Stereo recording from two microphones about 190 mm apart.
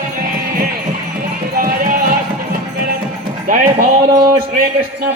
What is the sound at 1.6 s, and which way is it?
Music, 50° right (ahead or behind).